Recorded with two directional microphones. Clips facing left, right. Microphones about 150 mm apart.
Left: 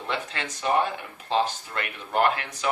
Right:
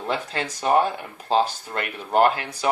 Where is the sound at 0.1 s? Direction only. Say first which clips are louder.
Right 4 dB; 35° right (ahead or behind).